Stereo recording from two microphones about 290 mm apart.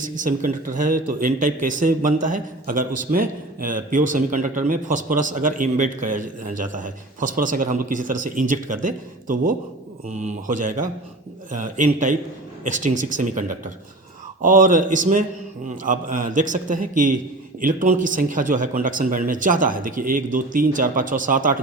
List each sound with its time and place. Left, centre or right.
0.0 s a man's voice: right